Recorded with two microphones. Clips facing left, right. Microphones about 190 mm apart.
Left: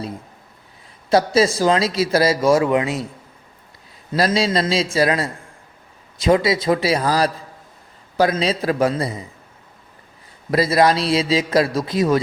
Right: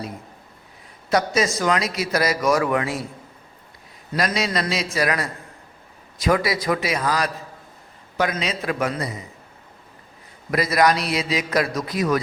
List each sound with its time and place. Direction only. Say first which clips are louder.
1.1 s a man's voice: left 5 dB; 30° left (ahead or behind)
4.1 s a man's voice: left 5 dB; 25° left (ahead or behind)
10.5 s a man's voice: left 3 dB; 30° left (ahead or behind)